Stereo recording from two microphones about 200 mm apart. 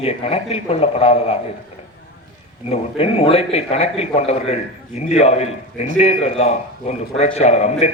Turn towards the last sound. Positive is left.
turn(degrees=35)  # may be behind; listen again after turning